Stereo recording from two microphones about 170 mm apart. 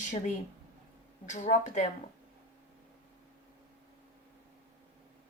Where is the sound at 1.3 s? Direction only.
45° left (ahead or behind).